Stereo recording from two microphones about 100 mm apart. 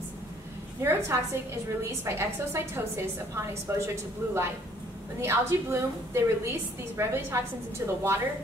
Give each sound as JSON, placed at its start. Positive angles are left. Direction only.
{"t": 0.8, "sound": "a woman's voice", "side_deg": -25}